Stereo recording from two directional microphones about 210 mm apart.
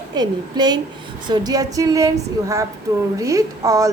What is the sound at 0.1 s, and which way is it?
A woman's voice, 20° right (ahead or behind).